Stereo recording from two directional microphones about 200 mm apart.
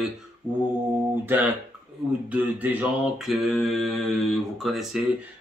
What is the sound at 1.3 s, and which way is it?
Speech, 10° right (ahead or behind).